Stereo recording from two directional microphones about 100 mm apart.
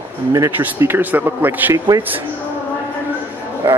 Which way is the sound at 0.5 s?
20° right (ahead or behind).